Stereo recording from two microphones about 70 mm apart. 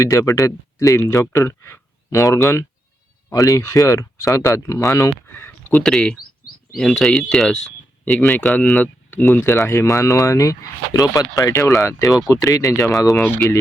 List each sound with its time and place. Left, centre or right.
0.0 s speech: left
2.0 s speech: left
3.3 s speech: left
5.8 s speech: centre
8.7 s speech: left
9.4 s speech: left